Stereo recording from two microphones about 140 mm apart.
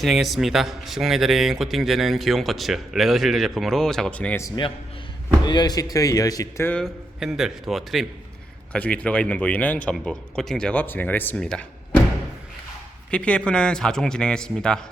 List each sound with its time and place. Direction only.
0.0 s speech: centre (ahead or behind)
4.4 s speech: 25° left (ahead or behind)
6.7 s speech: 5° left (ahead or behind)
13.1 s speech: 10° left (ahead or behind)